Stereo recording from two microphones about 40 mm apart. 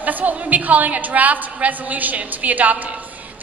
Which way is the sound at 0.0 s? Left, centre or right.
Right.